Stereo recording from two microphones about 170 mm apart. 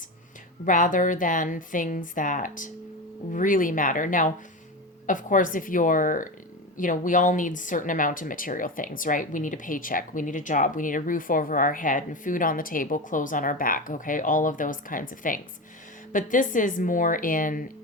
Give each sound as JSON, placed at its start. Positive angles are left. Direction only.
{"t": 0.6, "sound": "speech", "side_deg": 50}